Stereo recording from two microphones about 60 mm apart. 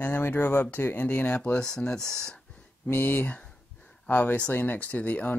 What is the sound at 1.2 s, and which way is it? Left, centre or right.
Speech, centre.